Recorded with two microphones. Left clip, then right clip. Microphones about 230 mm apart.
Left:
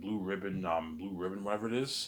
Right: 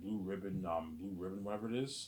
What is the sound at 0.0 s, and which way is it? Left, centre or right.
Speech, left.